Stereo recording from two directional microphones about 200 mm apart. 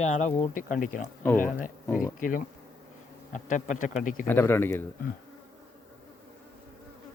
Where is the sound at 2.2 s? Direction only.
40° left (ahead or behind).